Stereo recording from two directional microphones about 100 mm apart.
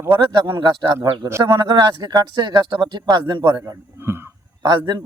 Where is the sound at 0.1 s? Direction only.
50° right (ahead or behind).